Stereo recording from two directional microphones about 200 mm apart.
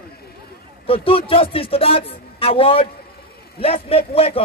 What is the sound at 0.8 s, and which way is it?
A man's voice, 30° left (ahead or behind).